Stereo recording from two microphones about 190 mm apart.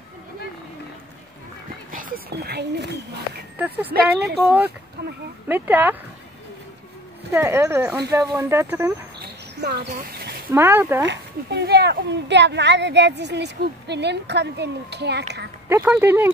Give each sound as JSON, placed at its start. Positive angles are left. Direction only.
{"t": 1.9, "sound": "speech", "side_deg": -45}
{"t": 3.5, "sound": "speech", "side_deg": -10}
{"t": 5.0, "sound": "a woman's voice", "side_deg": -60}
{"t": 5.5, "sound": "speech", "side_deg": -10}
{"t": 7.2, "sound": "speech", "side_deg": -10}
{"t": 9.2, "sound": "a sound", "side_deg": -55}
{"t": 10.5, "sound": "speech", "side_deg": -10}
{"t": 11.1, "sound": "a woman's voice", "side_deg": -60}
{"t": 15.7, "sound": "speech", "side_deg": -10}